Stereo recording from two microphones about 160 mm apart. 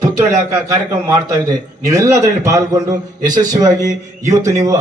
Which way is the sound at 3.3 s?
25° right (ahead or behind).